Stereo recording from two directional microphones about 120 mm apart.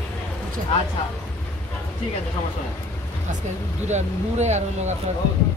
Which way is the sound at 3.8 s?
75° right (ahead or behind).